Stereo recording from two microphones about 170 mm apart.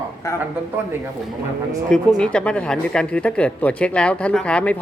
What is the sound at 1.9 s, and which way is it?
Speech, 5° left (ahead or behind).